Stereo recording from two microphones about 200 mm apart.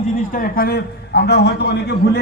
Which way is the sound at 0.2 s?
45° left (ahead or behind).